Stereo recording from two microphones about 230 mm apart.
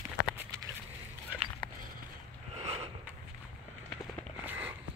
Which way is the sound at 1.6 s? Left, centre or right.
Centre.